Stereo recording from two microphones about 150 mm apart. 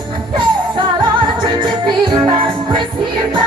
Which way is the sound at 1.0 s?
30° right (ahead or behind).